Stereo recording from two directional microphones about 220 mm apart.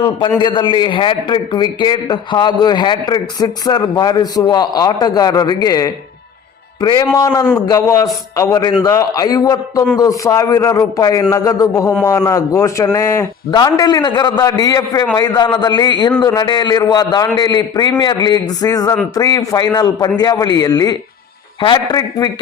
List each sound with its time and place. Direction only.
0.3 s a man's voice: 20° left (ahead or behind)